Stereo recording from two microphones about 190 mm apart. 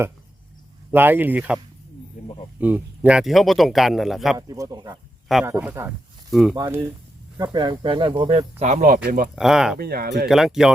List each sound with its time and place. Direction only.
0.9 s speech: 10° right (ahead or behind)
2.6 s speech: 10° right (ahead or behind)
4.4 s speech: 20° right (ahead or behind)
7.3 s speech: 20° right (ahead or behind); by 9.3 s 50° right (ahead or behind)
9.3 s speech: centre (ahead or behind)
9.7 s speech: 55° right (ahead or behind)
10.2 s speech: centre (ahead or behind)